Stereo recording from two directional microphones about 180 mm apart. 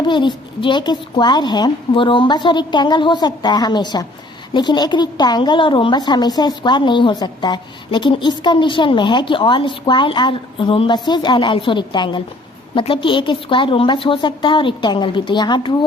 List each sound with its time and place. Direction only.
0.1 s a woman's voice: 25° left (ahead or behind)